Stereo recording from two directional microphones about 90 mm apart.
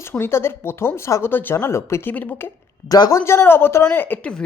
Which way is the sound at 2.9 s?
40° left (ahead or behind).